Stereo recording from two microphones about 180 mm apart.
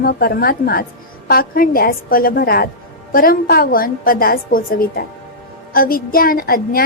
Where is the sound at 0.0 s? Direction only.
55° left (ahead or behind).